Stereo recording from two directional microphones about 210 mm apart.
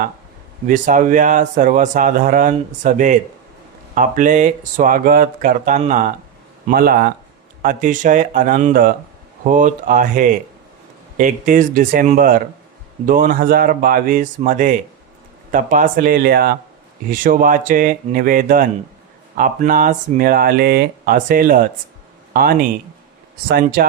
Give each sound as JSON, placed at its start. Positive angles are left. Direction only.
{"t": 0.7, "sound": "a man's voice", "side_deg": -40}